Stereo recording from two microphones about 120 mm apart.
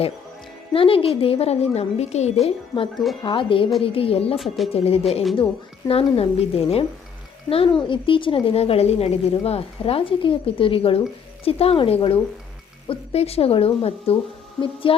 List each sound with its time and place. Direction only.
0.7 s a woman's voice: 50° left (ahead or behind)
4.4 s speech: centre (ahead or behind)
4.7 s a woman's voice: 60° left (ahead or behind)
7.8 s a woman's voice: 45° left (ahead or behind)